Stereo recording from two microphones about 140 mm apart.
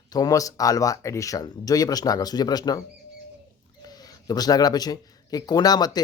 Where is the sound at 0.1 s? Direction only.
25° left (ahead or behind).